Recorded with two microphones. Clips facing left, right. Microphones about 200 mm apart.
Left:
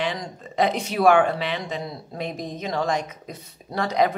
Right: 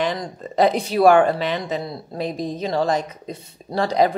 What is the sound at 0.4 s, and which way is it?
A woman's voice, 35° right (ahead or behind).